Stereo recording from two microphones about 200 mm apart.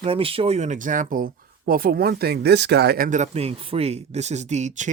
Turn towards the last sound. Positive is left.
turn(degrees=-35)  # may be behind; listen again after turning